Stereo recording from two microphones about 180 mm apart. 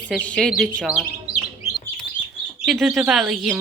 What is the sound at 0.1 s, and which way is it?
Speech, 5° left (ahead or behind).